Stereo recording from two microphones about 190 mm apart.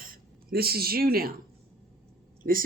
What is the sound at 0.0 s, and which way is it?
Speech, 50° right (ahead or behind).